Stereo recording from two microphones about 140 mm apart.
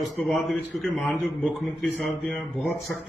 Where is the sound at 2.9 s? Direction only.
Centre (ahead or behind).